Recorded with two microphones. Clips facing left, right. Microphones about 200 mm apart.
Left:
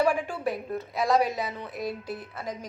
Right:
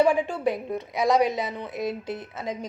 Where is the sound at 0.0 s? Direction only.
25° right (ahead or behind).